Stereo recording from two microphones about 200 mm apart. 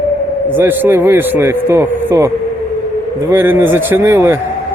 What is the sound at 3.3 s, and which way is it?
Speech, 10° right (ahead or behind).